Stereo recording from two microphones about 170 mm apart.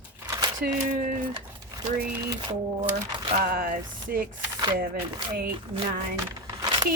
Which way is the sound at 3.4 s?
55° right (ahead or behind).